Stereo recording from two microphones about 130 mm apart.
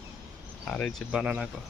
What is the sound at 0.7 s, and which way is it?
Speech, 5° left (ahead or behind).